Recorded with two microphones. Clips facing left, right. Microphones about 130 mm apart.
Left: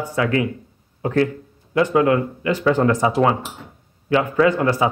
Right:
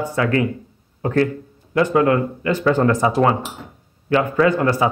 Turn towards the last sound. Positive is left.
turn(degrees=20)  # may be behind; listen again after turning